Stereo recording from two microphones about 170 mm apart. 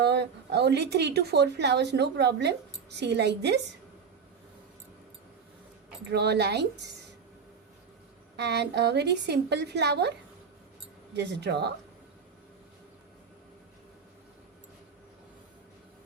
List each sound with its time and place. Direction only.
0.0 s a woman's voice: 80° right
6.1 s a woman's voice: 80° right
8.4 s a woman's voice: 85° right
11.1 s speech: 90° right